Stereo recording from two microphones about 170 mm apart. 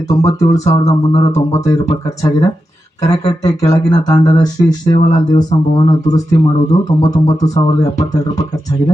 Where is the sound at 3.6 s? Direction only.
20° left (ahead or behind).